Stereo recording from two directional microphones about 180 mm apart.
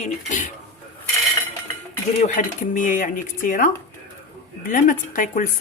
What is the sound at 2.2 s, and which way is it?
Speech, 45° left (ahead or behind).